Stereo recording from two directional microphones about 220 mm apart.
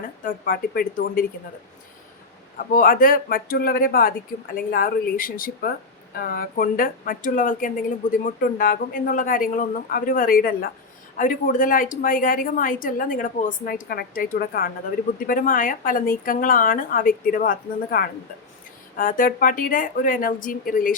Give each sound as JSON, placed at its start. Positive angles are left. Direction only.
{"t": 0.3, "sound": "a woman's voice", "side_deg": 40}
{"t": 2.7, "sound": "a woman's voice", "side_deg": 40}